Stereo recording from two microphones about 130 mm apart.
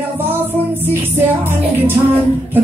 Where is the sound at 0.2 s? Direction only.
15° right (ahead or behind).